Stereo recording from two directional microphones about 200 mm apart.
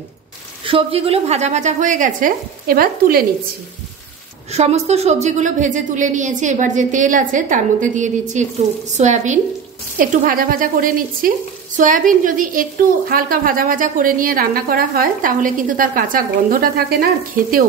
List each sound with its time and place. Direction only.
0.7 s a woman's voice: 30° right (ahead or behind); by 3.3 s 45° right (ahead or behind)
4.5 s a woman's voice: 35° right (ahead or behind)